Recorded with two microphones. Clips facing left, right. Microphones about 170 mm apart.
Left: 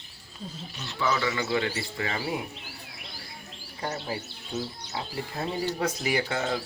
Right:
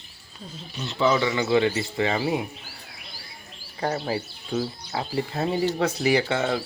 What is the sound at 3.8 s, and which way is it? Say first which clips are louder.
Speech: right 7 dB; 60° right (ahead or behind).